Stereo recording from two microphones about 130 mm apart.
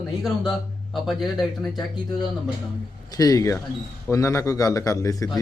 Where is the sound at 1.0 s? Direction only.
Centre (ahead or behind).